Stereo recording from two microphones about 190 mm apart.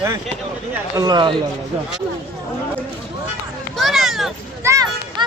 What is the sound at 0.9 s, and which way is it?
Speech, 20° right (ahead or behind).